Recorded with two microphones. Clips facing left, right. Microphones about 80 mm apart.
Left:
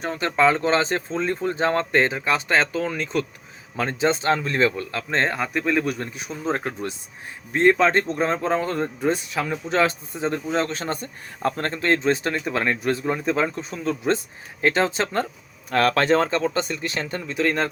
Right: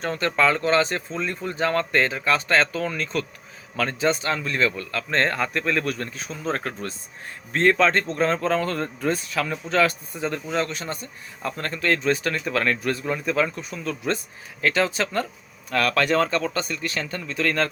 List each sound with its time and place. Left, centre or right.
0.0 s speech: centre